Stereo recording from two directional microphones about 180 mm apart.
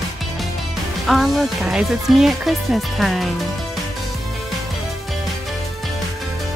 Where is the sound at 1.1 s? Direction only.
Centre (ahead or behind).